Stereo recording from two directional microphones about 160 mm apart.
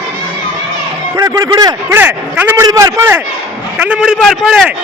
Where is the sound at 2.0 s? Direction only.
10° right (ahead or behind).